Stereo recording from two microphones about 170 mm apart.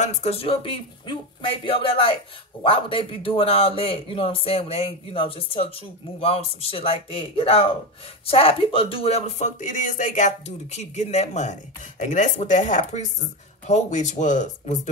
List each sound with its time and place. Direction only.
0.0 s a man's voice: 40° left (ahead or behind)